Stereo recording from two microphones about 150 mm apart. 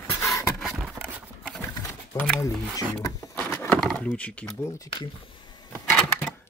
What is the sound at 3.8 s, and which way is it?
Speech, 5° left (ahead or behind).